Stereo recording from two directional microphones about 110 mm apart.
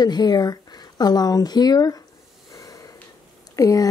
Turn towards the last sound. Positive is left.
turn(degrees=30)  # may be behind; listen again after turning